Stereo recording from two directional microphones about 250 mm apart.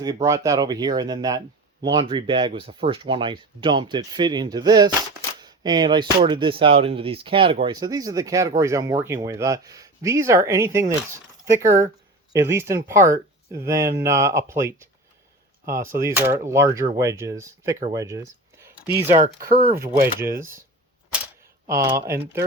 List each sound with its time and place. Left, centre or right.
0.0 s speech: centre
17.9 s a sound: centre
19.0 s speech: right
19.7 s speech: centre
21.8 s speech: centre